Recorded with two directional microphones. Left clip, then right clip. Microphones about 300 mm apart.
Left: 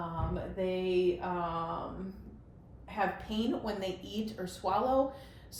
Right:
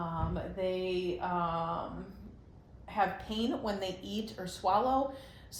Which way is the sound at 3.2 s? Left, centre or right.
Centre.